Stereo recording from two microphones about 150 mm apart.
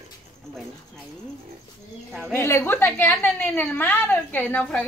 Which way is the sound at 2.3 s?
15° left (ahead or behind).